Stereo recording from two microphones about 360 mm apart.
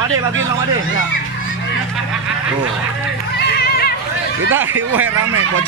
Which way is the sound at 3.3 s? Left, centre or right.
Left.